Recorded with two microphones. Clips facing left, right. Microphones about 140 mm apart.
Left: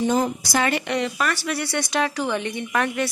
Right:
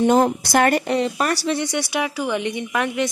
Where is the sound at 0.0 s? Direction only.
60° right (ahead or behind); by 1.5 s 40° right (ahead or behind).